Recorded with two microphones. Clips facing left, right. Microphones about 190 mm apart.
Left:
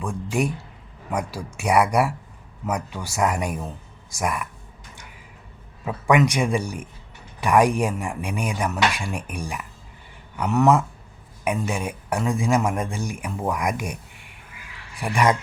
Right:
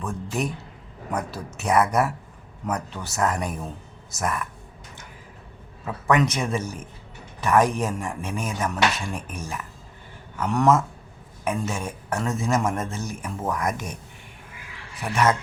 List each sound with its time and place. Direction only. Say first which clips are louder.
0.0 s a man's voice: left 3 dB; 10° left (ahead or behind)
5.8 s a man's voice: left 2 dB; 10° left (ahead or behind)
15.0 s a man's voice: left 1 dB; 15° left (ahead or behind)